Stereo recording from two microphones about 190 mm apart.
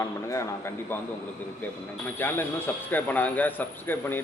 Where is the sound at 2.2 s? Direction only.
10° left (ahead or behind).